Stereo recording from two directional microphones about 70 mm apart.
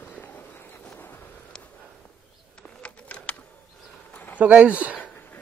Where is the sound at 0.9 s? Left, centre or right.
Left.